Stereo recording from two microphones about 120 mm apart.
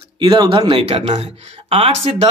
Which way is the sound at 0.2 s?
40° right (ahead or behind).